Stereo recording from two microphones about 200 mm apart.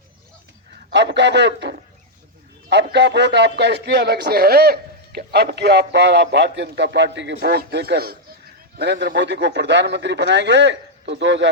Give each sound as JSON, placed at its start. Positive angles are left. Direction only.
{"t": 0.9, "sound": "a man's voice", "side_deg": -60}